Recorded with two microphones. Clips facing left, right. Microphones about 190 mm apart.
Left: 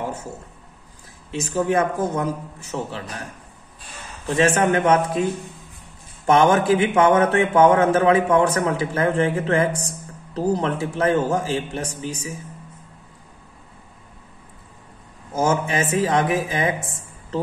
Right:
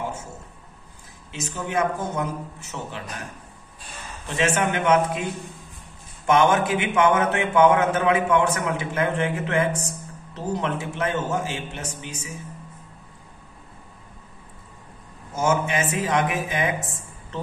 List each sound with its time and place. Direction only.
1.3 s speech: 35° left (ahead or behind)
4.4 s speech: 40° left (ahead or behind)
6.2 s speech: 35° left (ahead or behind)
15.3 s speech: 35° left (ahead or behind)